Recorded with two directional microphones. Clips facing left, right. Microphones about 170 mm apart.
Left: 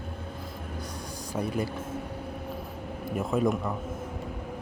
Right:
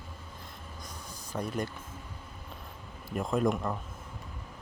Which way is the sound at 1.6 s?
70° left (ahead or behind).